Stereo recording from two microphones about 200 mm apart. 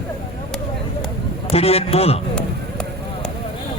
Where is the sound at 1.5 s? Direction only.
30° left (ahead or behind).